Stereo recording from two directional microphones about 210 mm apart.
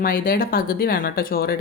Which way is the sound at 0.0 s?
45° left (ahead or behind).